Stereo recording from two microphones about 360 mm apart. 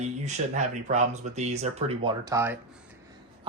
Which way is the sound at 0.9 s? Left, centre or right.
Centre.